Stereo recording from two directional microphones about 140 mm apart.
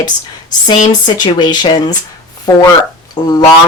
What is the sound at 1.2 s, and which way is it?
Speech, 30° left (ahead or behind).